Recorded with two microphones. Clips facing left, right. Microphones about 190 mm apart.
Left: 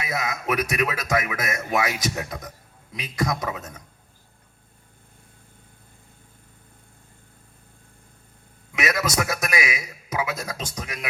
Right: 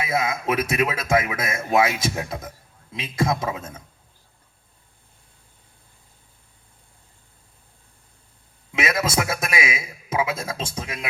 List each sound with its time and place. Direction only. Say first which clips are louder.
0.0 s a man's voice: right 4 dB; 25° right (ahead or behind)
8.7 s a man's voice: right 2 dB; 25° right (ahead or behind)